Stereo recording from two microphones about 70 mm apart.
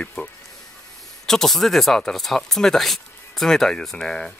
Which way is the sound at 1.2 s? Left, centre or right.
Centre.